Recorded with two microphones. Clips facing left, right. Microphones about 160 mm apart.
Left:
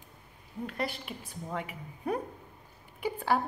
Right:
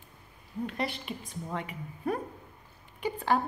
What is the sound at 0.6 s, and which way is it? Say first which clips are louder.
A woman's voice: right 1 dB; centre (ahead or behind).